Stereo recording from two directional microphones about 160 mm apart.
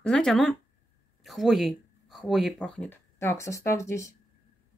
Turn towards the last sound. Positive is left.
turn(degrees=20)  # may be behind; listen again after turning